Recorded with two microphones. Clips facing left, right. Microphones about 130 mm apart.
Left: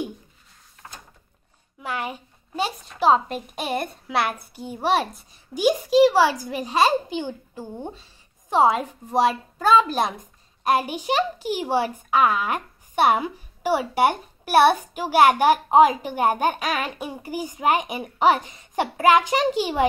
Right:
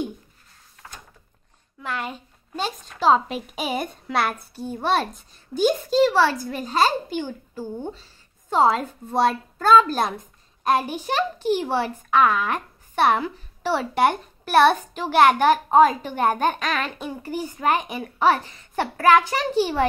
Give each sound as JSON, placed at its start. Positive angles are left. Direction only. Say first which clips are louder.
{"t": 1.8, "sound": "a woman's voice", "louder": "left 1 dB", "side_deg": 10}
{"t": 3.3, "sound": "a child's voice", "louder": "even", "side_deg": -5}
{"t": 4.6, "sound": "a child's voice", "louder": "left 1 dB", "side_deg": 15}